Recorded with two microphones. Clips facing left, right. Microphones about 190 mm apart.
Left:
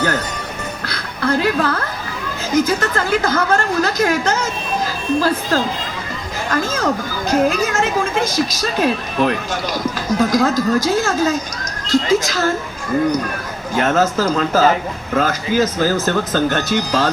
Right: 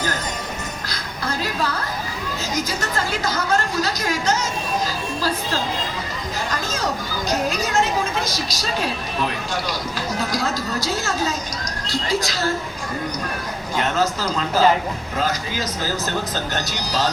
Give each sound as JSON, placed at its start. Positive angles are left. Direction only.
{"t": 0.9, "sound": "a sound", "side_deg": 60}
{"t": 2.6, "sound": "speech", "side_deg": 50}
{"t": 13.7, "sound": "speech", "side_deg": 50}